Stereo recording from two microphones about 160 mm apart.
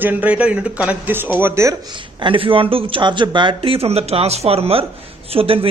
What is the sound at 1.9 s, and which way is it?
A man's voice, 30° right (ahead or behind).